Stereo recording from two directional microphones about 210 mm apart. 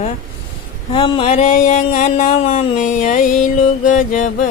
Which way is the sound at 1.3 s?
35° left (ahead or behind).